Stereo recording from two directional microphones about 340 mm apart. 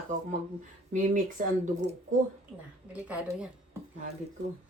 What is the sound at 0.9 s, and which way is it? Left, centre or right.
Speech, right.